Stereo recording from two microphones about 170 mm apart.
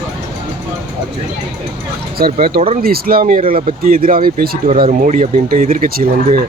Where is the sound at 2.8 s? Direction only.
60° right (ahead or behind).